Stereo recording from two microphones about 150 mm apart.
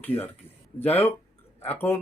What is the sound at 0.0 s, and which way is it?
Speech, 15° left (ahead or behind).